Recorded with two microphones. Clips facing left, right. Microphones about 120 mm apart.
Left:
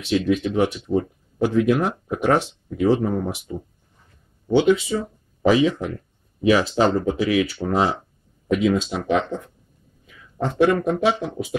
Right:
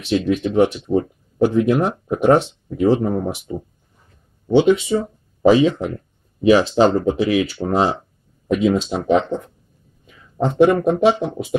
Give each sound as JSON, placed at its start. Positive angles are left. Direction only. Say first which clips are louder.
{"t": 0.1, "sound": "speech", "louder": "right 2 dB", "side_deg": -30}
{"t": 4.5, "sound": "speech", "louder": "right 3 dB", "side_deg": -20}